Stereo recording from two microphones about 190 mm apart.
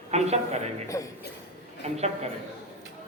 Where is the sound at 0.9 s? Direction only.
15° left (ahead or behind).